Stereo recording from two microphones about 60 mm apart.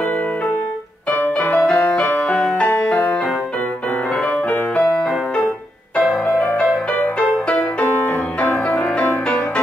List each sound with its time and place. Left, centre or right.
1.4 s music: centre
2.0 s music: left
2.4 s music: centre
4.9 s music: centre
6.9 s music: centre